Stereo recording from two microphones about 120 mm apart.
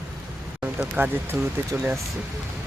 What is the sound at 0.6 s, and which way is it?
Speech, 15° right (ahead or behind).